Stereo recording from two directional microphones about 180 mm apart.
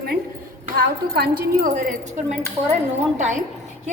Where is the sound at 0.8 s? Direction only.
55° right (ahead or behind); by 2.4 s 40° right (ahead or behind).